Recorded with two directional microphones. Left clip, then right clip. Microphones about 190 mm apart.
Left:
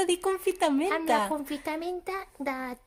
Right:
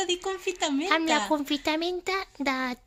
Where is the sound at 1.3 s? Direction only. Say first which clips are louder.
Right 5 dB; 25° right (ahead or behind).